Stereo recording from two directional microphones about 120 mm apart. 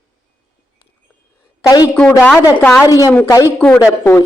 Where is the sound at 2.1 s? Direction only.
15° left (ahead or behind).